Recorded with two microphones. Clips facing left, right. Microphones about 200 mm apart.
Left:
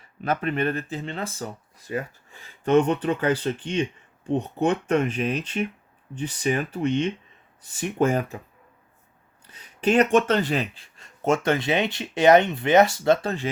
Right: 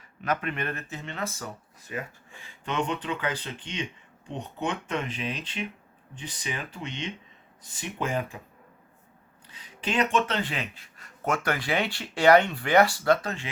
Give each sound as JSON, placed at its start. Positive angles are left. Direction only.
{"t": 0.2, "sound": "speech", "side_deg": 35}
{"t": 2.4, "sound": "speech", "side_deg": 45}
{"t": 9.8, "sound": "speech", "side_deg": 45}